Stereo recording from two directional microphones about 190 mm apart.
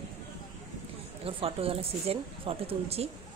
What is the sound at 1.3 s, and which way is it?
Speech, 30° right (ahead or behind).